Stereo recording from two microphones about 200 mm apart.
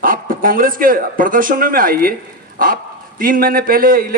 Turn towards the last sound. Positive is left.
turn(degrees=-45)  # may be behind; listen again after turning